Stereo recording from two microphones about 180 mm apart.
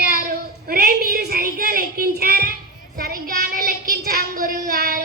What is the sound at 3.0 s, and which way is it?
Child singing, 55° right (ahead or behind).